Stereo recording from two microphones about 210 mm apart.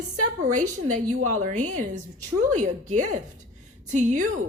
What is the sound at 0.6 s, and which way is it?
A woman's voice, 35° right (ahead or behind).